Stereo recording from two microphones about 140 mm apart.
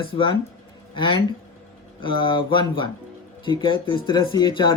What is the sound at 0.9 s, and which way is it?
Speech, 35° left (ahead or behind).